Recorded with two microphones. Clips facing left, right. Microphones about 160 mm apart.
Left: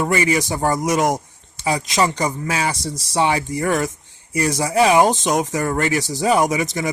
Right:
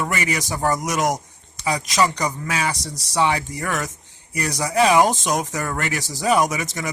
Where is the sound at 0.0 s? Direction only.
30° left (ahead or behind).